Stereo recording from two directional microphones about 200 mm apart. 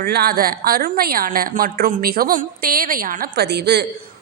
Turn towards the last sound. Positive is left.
turn(degrees=-55)  # may be behind; listen again after turning